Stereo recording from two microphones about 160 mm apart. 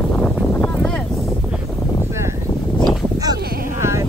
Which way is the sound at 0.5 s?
10° left (ahead or behind).